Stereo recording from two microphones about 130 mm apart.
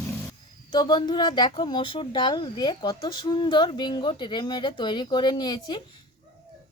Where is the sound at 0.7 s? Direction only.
35° left (ahead or behind).